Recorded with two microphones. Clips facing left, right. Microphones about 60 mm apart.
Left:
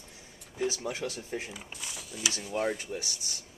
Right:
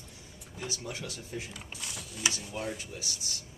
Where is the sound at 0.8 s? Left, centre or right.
Left.